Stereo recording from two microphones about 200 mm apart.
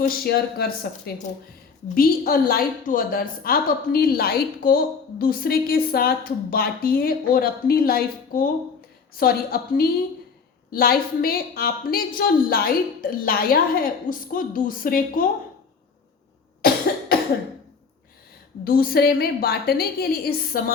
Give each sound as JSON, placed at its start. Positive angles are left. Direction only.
{"t": 0.0, "sound": "a woman's voice", "side_deg": 50}
{"t": 18.6, "sound": "a woman's voice", "side_deg": 45}